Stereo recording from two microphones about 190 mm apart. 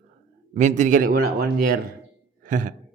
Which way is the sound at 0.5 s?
40° right (ahead or behind).